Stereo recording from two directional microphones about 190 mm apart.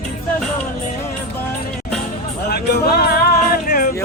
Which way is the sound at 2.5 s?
55° left (ahead or behind).